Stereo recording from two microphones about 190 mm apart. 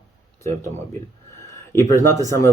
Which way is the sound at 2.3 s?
15° left (ahead or behind).